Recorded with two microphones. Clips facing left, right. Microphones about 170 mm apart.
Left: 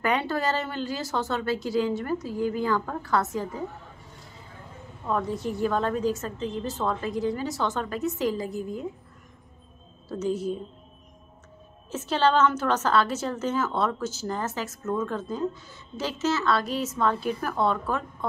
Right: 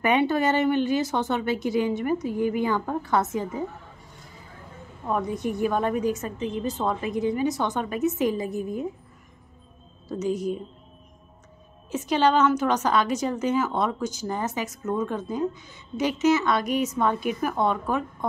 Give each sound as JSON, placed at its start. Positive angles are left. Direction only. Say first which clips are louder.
{"t": 0.0, "sound": "speech", "louder": "right 4 dB", "side_deg": -20}
{"t": 5.0, "sound": "a woman's voice", "louder": "right 1 dB", "side_deg": -15}
{"t": 10.0, "sound": "a woman's voice", "louder": "right 1 dB", "side_deg": -10}
{"t": 11.9, "sound": "a woman's voice", "louder": "right 2 dB", "side_deg": -15}